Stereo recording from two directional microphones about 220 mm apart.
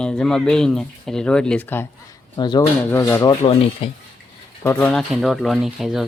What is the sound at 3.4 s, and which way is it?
Speech, 25° left (ahead or behind).